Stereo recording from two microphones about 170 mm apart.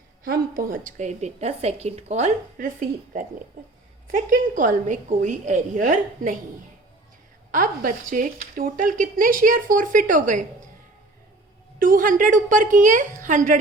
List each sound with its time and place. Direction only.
0.3 s a woman's voice: 55° right (ahead or behind); by 2.6 s 40° right (ahead or behind)
4.1 s a woman's voice: 50° right (ahead or behind)
7.5 s a woman's voice: 50° right (ahead or behind)
11.8 s a woman's voice: 55° right (ahead or behind)